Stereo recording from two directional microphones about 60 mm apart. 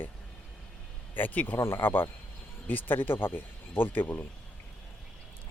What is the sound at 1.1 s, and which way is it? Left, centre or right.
Speech, left.